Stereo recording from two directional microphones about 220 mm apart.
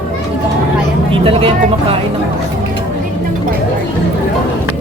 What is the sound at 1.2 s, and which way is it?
Speech, 25° right (ahead or behind).